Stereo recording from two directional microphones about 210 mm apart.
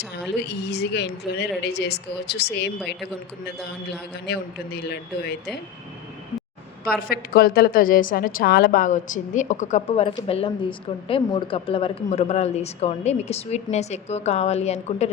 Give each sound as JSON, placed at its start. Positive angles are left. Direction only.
{"t": 0.2, "sound": "a woman's voice", "side_deg": 55}
{"t": 4.3, "sound": "a woman's voice", "side_deg": 50}
{"t": 6.9, "sound": "a woman's voice", "side_deg": 45}